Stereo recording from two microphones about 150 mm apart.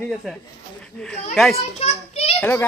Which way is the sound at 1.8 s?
45° left (ahead or behind).